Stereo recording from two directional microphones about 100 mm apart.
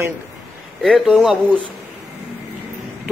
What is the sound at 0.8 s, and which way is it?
Speech, centre (ahead or behind).